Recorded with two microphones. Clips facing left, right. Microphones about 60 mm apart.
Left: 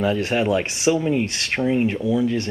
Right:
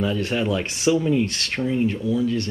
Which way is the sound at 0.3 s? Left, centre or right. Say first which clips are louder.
Left 3 dB; left.